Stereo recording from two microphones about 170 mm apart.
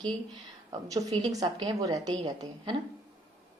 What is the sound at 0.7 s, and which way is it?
Speech, 20° right (ahead or behind).